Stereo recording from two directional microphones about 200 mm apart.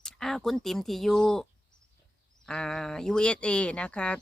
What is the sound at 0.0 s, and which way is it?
Speech, centre (ahead or behind).